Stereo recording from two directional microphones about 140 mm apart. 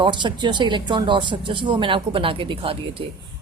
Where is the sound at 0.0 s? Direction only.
35° right (ahead or behind).